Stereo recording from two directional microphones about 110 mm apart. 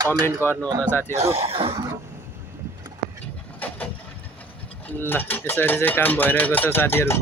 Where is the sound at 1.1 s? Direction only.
65° right (ahead or behind).